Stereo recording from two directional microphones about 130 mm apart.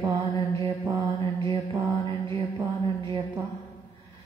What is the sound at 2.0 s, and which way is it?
A woman's voice, 35° right (ahead or behind).